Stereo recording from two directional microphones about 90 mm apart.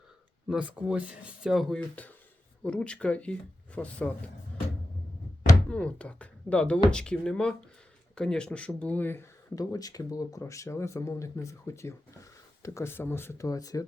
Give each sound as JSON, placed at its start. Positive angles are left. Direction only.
{"t": 0.4, "sound": "speech", "side_deg": -10}
{"t": 5.6, "sound": "speech", "side_deg": 10}
{"t": 9.6, "sound": "speech", "side_deg": 40}
{"t": 13.5, "sound": "speech", "side_deg": 40}